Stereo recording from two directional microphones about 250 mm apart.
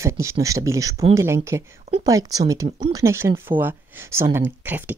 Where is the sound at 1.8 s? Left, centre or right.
Right; by 4.9 s centre.